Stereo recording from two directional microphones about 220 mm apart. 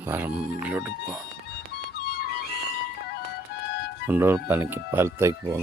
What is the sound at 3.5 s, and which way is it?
Music, 90° right.